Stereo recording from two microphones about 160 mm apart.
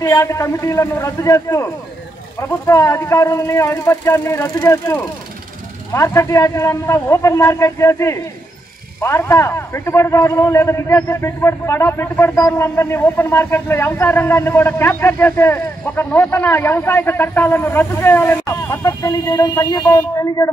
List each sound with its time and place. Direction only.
0.0 s speech: 20° left (ahead or behind)